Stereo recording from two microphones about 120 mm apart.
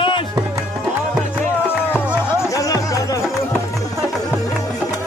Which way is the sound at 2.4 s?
30° left (ahead or behind).